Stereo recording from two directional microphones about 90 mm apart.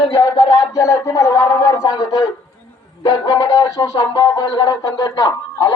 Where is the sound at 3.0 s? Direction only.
45° left (ahead or behind).